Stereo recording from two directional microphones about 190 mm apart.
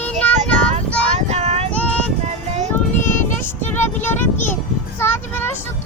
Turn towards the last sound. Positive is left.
turn(degrees=10)  # may be behind; listen again after turning